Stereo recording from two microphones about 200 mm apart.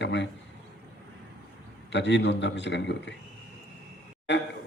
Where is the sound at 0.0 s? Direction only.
60° left (ahead or behind).